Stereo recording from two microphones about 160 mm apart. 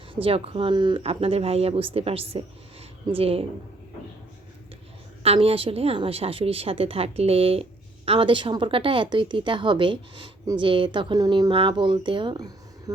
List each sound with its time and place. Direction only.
0.1 s a woman's voice: 35° right (ahead or behind)
5.2 s a woman's voice: 40° right (ahead or behind)